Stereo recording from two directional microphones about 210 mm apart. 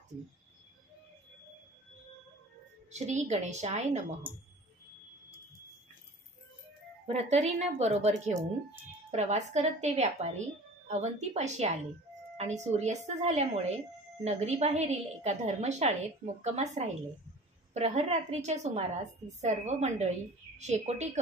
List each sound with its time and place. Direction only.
2.9 s a woman's voice: 30° right (ahead or behind)
4.2 s speech: 10° right (ahead or behind)
7.1 s a woman's voice: 30° right (ahead or behind)